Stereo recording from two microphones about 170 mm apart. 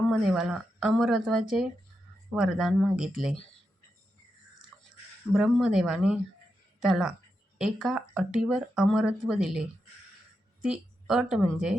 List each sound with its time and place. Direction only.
0.1 s speech: centre (ahead or behind)
5.3 s a woman's voice: 5° right (ahead or behind)